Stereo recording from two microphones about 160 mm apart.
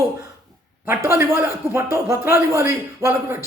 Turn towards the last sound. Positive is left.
turn(degrees=-15)  # may be behind; listen again after turning